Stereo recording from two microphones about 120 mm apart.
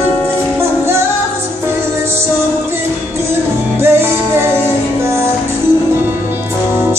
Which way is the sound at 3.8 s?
20° right (ahead or behind).